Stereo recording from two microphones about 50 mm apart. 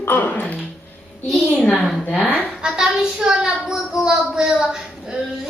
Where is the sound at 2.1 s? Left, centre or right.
Left.